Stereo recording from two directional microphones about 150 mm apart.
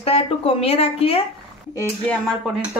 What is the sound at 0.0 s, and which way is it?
Speech, 40° left (ahead or behind).